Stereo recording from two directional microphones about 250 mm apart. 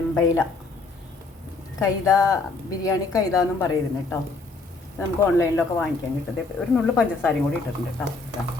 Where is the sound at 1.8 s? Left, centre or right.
Centre.